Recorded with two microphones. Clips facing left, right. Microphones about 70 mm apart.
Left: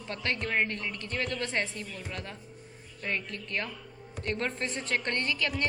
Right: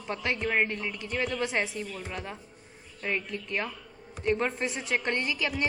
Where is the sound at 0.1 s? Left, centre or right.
Centre.